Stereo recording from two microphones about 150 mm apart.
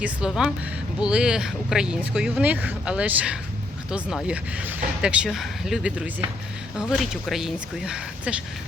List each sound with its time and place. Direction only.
0.0 s speech: 5° right (ahead or behind)